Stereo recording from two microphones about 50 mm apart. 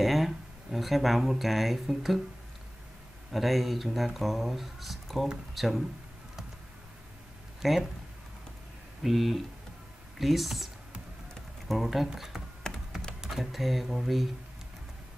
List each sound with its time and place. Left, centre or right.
0.0 s speech: centre
3.3 s speech: centre
7.6 s speech: centre
9.0 s speech: centre
12.6 s typing: centre
13.2 s speech: centre